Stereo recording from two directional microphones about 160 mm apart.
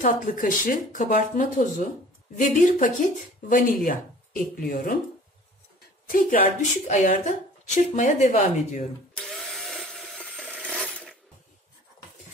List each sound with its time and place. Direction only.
0.0 s speech: 55° left (ahead or behind)
5.8 s a sound: 65° left (ahead or behind)
6.9 s a woman's voice: 55° left (ahead or behind)
9.1 s tools: centre (ahead or behind)